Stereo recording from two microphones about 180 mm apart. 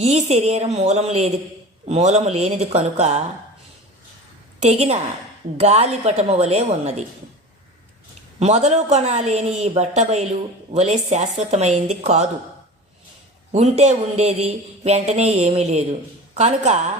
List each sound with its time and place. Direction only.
0.0 s speech: 35° right (ahead or behind)
4.6 s speech: 40° right (ahead or behind)
8.4 s speech: 40° right (ahead or behind)
13.5 s speech: 40° right (ahead or behind)